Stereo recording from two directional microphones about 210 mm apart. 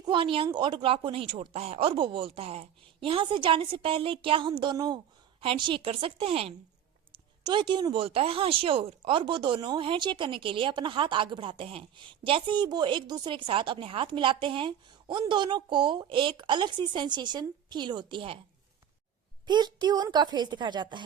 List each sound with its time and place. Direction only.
0.0 s a woman's voice: 25° right (ahead or behind)
19.5 s a woman's voice: 20° right (ahead or behind)